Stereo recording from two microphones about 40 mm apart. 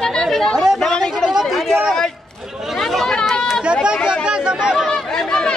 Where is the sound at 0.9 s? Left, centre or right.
Centre.